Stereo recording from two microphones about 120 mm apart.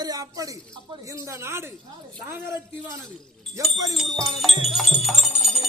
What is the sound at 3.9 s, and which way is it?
Wind chime, centre (ahead or behind).